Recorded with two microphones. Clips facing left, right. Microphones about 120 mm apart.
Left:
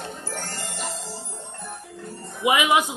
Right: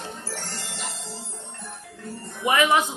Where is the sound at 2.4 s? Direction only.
15° left (ahead or behind).